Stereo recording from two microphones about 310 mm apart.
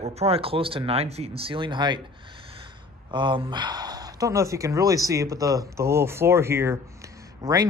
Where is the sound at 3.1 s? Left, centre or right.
Centre.